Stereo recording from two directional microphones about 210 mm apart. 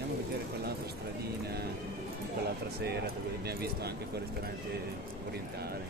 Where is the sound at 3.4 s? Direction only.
50° right (ahead or behind).